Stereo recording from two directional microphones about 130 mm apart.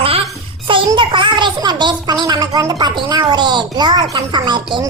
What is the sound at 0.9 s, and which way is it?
A child's voice, 40° right (ahead or behind).